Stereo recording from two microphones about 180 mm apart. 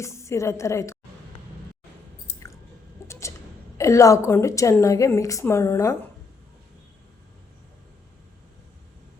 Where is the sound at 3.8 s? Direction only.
20° left (ahead or behind).